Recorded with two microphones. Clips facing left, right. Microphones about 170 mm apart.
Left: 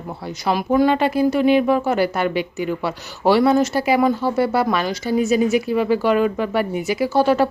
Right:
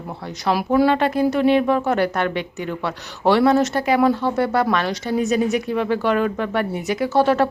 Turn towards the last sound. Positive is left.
turn(degrees=0)  # may be behind; listen again after turning